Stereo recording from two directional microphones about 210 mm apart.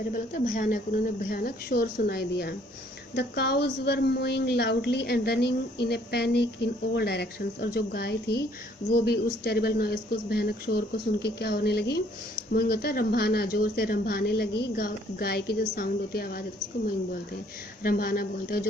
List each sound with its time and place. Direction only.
0.1 s a woman's voice: 40° left (ahead or behind)
17.8 s a woman's voice: 45° left (ahead or behind)